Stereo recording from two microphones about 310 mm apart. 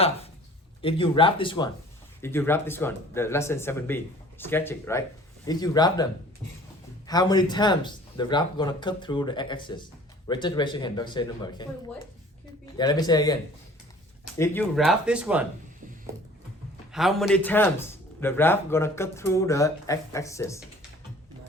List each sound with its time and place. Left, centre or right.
0.8 s speech: centre
7.1 s speech: centre
12.7 s speech: centre
16.9 s speech: centre